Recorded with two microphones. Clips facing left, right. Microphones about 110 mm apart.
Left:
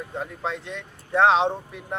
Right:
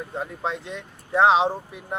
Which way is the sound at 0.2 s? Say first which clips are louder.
Right 1 dB; centre (ahead or behind).